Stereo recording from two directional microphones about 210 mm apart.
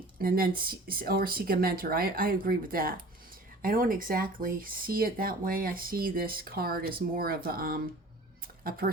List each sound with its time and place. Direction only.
0.2 s speech: 45° right (ahead or behind)
8.8 s speech: 45° right (ahead or behind)